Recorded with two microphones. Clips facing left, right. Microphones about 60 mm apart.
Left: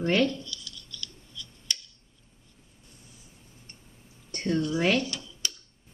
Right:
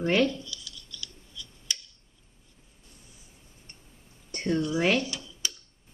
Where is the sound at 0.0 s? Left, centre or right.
Centre.